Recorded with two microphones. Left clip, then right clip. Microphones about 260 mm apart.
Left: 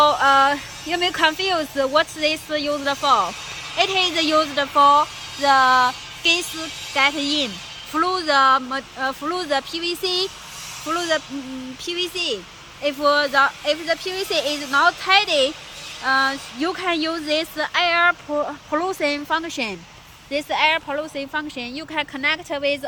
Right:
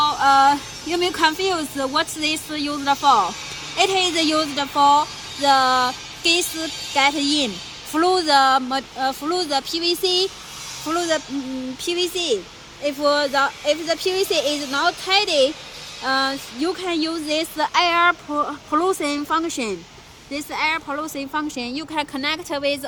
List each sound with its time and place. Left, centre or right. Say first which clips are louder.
0.0 s speech: even; centre